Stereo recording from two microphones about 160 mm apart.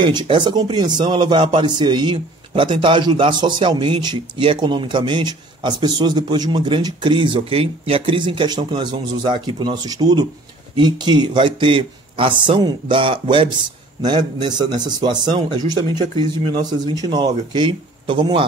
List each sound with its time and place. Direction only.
0.0 s speech: 30° right (ahead or behind)